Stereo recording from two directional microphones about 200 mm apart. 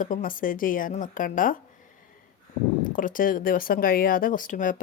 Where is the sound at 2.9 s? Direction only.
40° left (ahead or behind).